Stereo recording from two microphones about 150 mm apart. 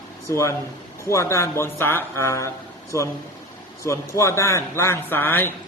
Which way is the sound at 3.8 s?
20° left (ahead or behind).